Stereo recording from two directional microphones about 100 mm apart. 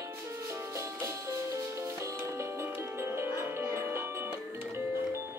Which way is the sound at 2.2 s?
25° right (ahead or behind).